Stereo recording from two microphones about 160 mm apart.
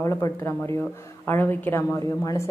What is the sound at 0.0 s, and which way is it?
A woman's voice, 20° left (ahead or behind).